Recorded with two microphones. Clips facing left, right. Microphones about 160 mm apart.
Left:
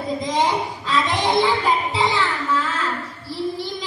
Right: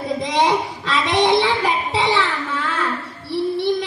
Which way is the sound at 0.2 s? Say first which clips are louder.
Right 3 dB; 80° right.